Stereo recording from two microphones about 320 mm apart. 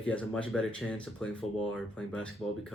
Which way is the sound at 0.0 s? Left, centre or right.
Centre.